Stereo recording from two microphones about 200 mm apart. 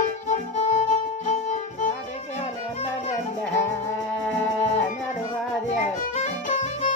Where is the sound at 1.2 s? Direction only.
35° left (ahead or behind).